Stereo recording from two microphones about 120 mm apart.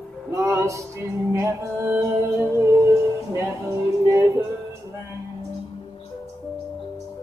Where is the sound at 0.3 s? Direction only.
25° right (ahead or behind).